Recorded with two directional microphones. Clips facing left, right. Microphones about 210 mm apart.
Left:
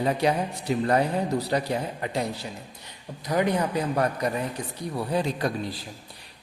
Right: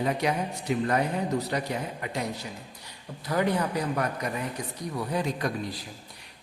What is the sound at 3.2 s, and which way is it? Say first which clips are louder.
Speech: left 2 dB; 20° left (ahead or behind).